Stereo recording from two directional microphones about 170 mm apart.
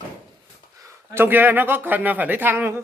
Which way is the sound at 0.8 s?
10° right (ahead or behind).